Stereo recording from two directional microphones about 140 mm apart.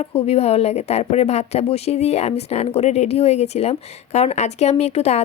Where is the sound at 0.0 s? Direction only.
45° left (ahead or behind).